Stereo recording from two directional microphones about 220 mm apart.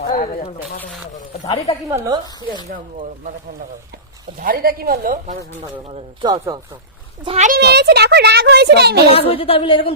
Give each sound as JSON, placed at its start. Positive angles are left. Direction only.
{"t": 0.0, "sound": "speech", "side_deg": 40}
{"t": 1.9, "sound": "a woman's voice", "side_deg": -20}
{"t": 2.6, "sound": "a woman's voice", "side_deg": -40}
{"t": 4.4, "sound": "a woman's voice", "side_deg": -40}
{"t": 5.9, "sound": "speech", "side_deg": -20}
{"t": 7.3, "sound": "a woman's voice", "side_deg": -30}
{"t": 7.5, "sound": "a child's voice", "side_deg": -50}
{"t": 9.0, "sound": "a woman's voice", "side_deg": 25}